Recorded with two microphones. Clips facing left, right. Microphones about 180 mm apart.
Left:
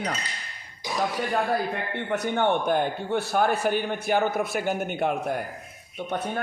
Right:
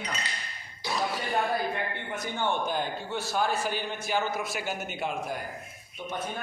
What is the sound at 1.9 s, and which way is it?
A man's voice, 65° left (ahead or behind).